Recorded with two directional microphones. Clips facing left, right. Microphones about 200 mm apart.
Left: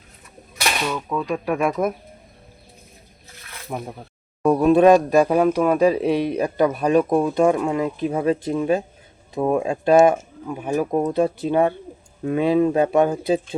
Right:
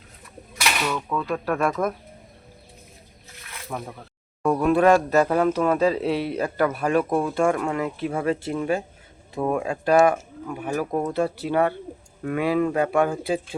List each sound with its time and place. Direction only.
0.9 s speech: 10° left (ahead or behind)
3.7 s speech: 20° left (ahead or behind)